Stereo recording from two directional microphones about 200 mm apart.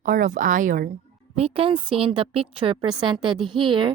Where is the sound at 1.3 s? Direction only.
30° right (ahead or behind).